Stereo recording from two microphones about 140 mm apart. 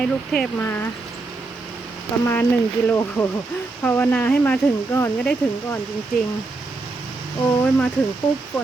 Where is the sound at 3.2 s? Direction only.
30° left (ahead or behind).